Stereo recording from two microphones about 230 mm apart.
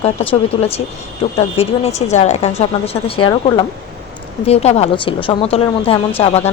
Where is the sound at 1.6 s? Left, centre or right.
Left.